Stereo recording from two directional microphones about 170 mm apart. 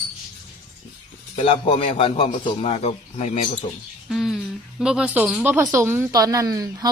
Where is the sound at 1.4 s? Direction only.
30° left (ahead or behind).